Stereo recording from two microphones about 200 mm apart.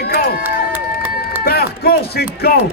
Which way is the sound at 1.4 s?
50° left (ahead or behind).